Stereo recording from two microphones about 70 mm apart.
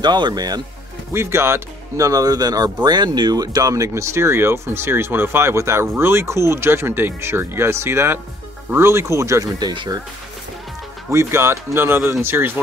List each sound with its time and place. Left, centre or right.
0.0 s speech: right
1.1 s speech: right
2.0 s speech: right
3.9 s speech: right
9.4 s speech: right
11.1 s speech: right